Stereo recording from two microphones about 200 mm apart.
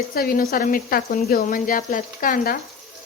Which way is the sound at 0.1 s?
45° left (ahead or behind).